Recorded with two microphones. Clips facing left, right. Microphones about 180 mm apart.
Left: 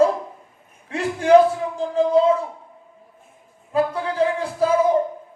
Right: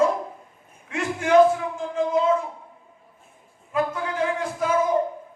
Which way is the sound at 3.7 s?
35° left (ahead or behind).